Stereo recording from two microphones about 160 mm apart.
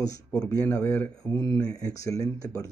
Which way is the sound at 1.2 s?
20° left (ahead or behind).